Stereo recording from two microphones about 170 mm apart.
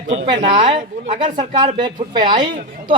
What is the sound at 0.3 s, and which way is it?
A man's voice, 25° right (ahead or behind).